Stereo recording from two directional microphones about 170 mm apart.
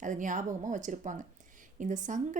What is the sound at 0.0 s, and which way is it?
Speech, 50° right (ahead or behind).